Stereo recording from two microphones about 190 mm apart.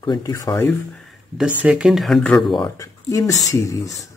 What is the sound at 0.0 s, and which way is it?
Speech, 20° left (ahead or behind).